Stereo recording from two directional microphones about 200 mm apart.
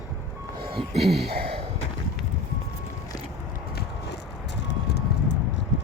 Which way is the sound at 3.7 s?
55° left (ahead or behind).